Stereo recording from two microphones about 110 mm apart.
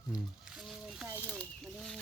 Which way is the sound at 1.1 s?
25° right (ahead or behind).